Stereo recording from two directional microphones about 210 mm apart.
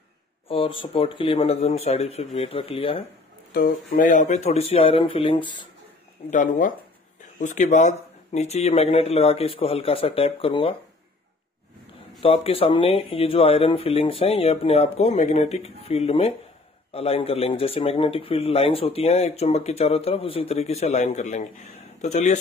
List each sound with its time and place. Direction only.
0.5 s speech: 25° left (ahead or behind)
3.5 s speech: 45° left (ahead or behind); by 5.7 s 20° left (ahead or behind)
6.3 s speech: 40° left (ahead or behind)
12.2 s speech: 25° left (ahead or behind)